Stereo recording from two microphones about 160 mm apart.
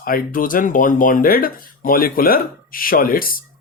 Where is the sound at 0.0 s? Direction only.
60° left (ahead or behind).